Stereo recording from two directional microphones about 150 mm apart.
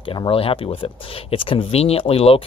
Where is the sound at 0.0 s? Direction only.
35° left (ahead or behind).